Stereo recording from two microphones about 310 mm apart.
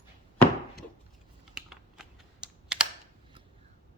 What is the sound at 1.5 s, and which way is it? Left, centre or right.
Computer keyboard, centre.